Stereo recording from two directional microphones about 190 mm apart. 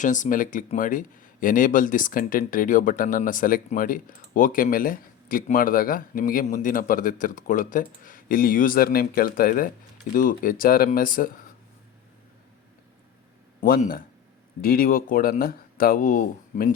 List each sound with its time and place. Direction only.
0.0 s speech: 40° left (ahead or behind)
13.6 s speech: 50° left (ahead or behind)